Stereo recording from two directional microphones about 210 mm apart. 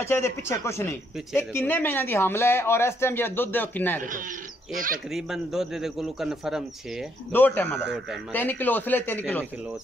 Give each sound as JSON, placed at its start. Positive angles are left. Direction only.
{"t": 0.0, "sound": "speech", "side_deg": 10}
{"t": 4.7, "sound": "speech", "side_deg": -40}
{"t": 5.1, "sound": "a man's voice", "side_deg": 0}
{"t": 7.3, "sound": "speech", "side_deg": 10}